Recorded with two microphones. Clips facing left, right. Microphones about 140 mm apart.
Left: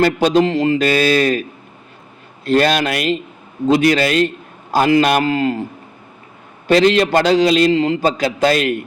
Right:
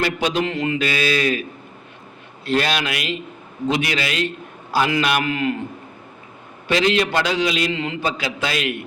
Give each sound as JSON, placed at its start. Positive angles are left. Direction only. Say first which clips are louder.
{"t": 0.0, "sound": "a man's voice", "louder": "left 8 dB", "side_deg": 40}
{"t": 6.7, "sound": "a man's voice", "louder": "left 6 dB", "side_deg": 40}